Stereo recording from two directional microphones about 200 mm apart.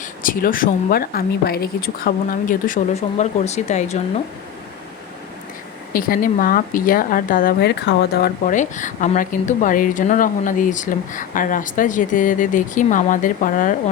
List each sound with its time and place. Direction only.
0.2 s a woman's voice: 45° left (ahead or behind)
5.9 s a woman's voice: 45° left (ahead or behind)